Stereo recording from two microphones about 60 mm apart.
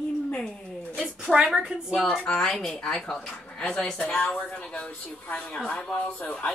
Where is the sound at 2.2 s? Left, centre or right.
Centre.